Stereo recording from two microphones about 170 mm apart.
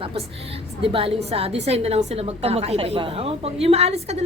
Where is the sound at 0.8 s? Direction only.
35° right (ahead or behind).